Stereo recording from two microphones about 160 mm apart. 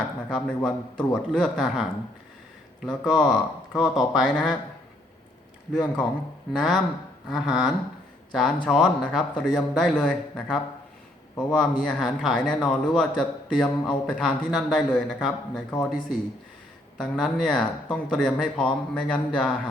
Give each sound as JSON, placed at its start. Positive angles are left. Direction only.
{"t": 0.3, "sound": "a man's voice", "side_deg": 5}
{"t": 5.7, "sound": "a man's voice", "side_deg": 0}